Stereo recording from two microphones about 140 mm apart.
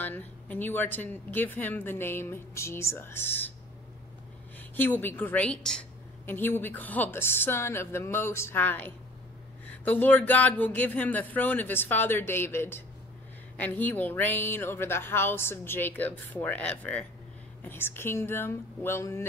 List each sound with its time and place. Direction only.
0.0 s a woman's voice: 15° left (ahead or behind)
4.6 s a woman's voice: 15° left (ahead or behind)